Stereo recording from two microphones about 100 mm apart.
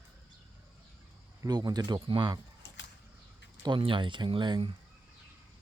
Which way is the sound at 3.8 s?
60° right (ahead or behind).